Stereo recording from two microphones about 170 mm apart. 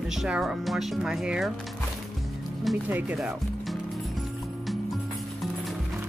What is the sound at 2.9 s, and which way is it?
Speech, 5° right (ahead or behind).